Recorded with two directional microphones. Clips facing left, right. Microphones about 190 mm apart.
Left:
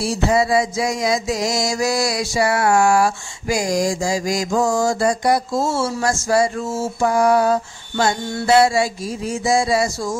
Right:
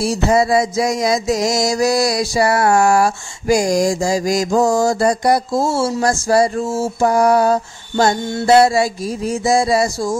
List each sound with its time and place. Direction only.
0.0 s mantra: 40° right (ahead or behind)